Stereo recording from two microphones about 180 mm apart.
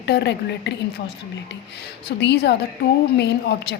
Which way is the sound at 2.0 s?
65° left (ahead or behind).